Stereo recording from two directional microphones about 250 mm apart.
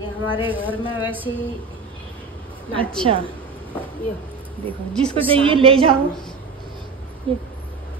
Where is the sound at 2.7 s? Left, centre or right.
Centre.